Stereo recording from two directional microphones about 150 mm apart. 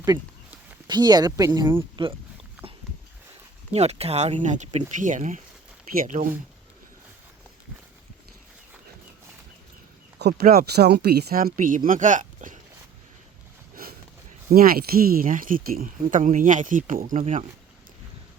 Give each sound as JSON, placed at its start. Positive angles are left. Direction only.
{"t": 0.9, "sound": "speech", "side_deg": -30}
{"t": 3.7, "sound": "speech", "side_deg": -45}
{"t": 10.2, "sound": "speech", "side_deg": -90}
{"t": 14.5, "sound": "speech", "side_deg": -75}